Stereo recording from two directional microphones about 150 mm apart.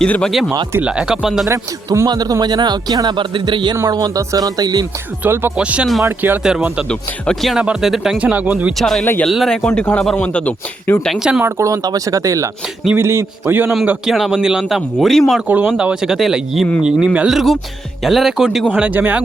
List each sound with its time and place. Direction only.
0.0 s speech: 5° left (ahead or behind)
1.5 s a man's voice: 20° right (ahead or behind)
5.2 s speech: 15° right (ahead or behind)
8.8 s speech: centre (ahead or behind)
11.1 s speech: 5° right (ahead or behind)
11.4 s a man's voice: 20° right (ahead or behind)
13.8 s speech: 5° right (ahead or behind)
15.4 s speech: 10° right (ahead or behind)